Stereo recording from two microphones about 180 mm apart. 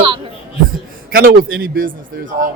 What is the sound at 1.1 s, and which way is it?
Speech, 55° right (ahead or behind).